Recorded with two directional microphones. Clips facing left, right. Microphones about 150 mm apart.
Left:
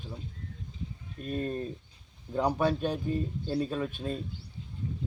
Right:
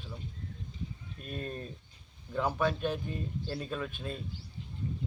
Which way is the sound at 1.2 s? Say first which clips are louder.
Left 7 dB; 35° left (ahead or behind).